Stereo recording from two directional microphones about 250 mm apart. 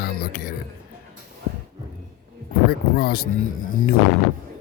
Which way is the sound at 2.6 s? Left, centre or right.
Left.